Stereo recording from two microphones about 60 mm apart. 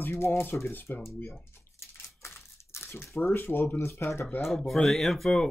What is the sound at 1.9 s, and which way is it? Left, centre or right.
Crumpling, left.